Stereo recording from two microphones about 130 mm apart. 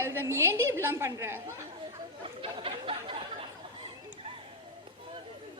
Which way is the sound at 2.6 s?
45° right (ahead or behind).